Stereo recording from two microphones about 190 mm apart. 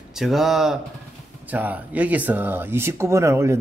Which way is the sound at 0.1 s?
Centre (ahead or behind).